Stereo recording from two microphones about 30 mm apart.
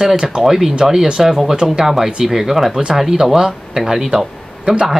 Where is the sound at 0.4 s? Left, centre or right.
Centre.